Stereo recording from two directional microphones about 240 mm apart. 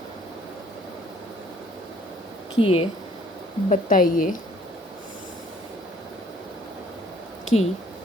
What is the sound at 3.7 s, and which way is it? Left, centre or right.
Speech, left.